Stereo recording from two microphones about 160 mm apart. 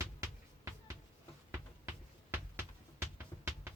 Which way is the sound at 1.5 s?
15° right (ahead or behind).